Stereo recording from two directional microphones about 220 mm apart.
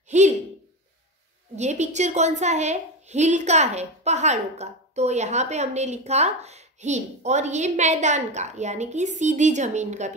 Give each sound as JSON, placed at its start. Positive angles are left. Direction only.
{"t": 0.1, "sound": "a woman's voice", "side_deg": -30}
{"t": 1.6, "sound": "a woman's voice", "side_deg": -30}